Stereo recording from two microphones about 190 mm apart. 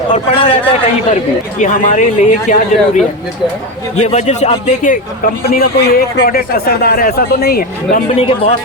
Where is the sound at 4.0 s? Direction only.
35° left (ahead or behind).